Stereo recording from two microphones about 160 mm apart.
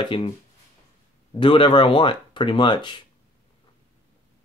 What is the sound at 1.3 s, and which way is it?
Speech, 30° left (ahead or behind).